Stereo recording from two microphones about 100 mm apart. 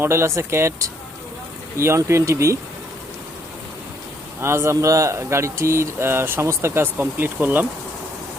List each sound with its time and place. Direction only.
0.0 s speech: 25° right (ahead or behind)
4.4 s speech: 25° right (ahead or behind)